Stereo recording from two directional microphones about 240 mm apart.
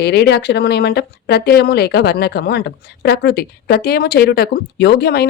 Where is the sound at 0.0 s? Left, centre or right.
Left.